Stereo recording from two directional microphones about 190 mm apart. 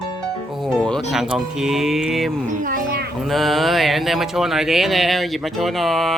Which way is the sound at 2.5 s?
45° right (ahead or behind).